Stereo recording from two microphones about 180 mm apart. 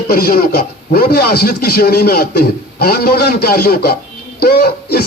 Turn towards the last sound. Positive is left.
turn(degrees=60)  # may be behind; listen again after turning